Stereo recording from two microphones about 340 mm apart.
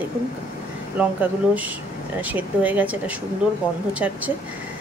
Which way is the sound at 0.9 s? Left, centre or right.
Centre.